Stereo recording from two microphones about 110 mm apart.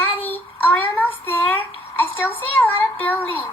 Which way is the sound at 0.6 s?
15° left (ahead or behind).